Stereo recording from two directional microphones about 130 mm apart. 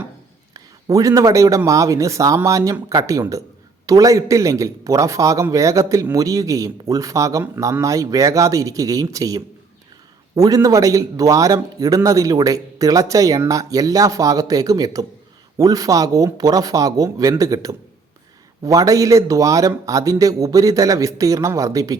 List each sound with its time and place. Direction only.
0.5 s a man's voice: 25° right (ahead or behind)